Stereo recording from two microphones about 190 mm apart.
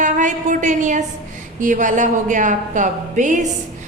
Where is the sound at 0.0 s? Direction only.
40° right (ahead or behind).